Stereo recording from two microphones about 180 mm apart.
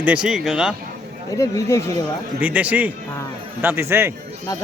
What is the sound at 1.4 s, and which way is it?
Speech, 15° left (ahead or behind).